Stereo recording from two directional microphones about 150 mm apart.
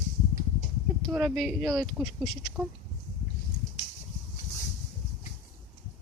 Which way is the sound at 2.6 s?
15° right (ahead or behind).